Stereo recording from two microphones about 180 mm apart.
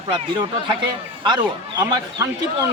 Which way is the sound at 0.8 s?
25° right (ahead or behind).